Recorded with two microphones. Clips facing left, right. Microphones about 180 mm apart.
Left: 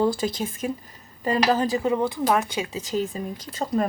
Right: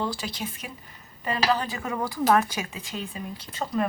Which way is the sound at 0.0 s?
45° left (ahead or behind).